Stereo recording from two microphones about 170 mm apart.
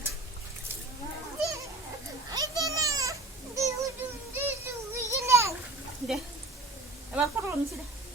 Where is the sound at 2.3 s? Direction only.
20° right (ahead or behind).